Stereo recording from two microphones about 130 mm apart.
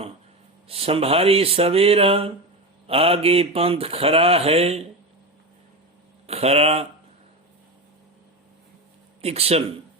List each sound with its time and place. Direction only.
0.7 s mantra: 45° right (ahead or behind)
6.2 s mantra: 55° right (ahead or behind)
9.2 s mantra: 50° right (ahead or behind)